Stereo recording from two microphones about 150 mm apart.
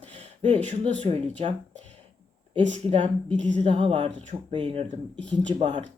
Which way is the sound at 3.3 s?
10° left (ahead or behind).